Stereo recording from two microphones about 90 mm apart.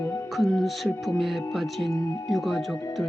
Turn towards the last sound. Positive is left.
turn(degrees=0)  # may be behind; listen again after turning